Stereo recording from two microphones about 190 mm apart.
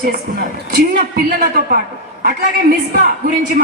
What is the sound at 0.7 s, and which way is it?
A woman's voice, 50° right (ahead or behind).